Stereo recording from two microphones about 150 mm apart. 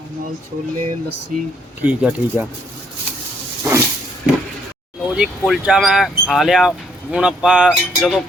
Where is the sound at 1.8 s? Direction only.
10° right (ahead or behind).